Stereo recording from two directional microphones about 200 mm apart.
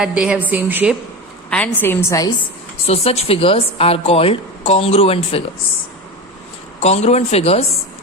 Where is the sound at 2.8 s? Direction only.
30° left (ahead or behind).